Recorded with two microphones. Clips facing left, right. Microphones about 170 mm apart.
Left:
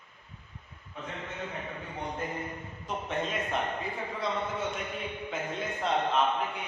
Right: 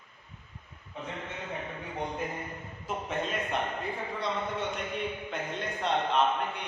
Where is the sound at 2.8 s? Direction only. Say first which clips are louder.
Even; centre (ahead or behind).